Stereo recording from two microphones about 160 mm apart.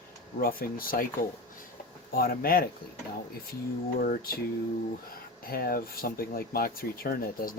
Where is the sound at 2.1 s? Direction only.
65° left (ahead or behind).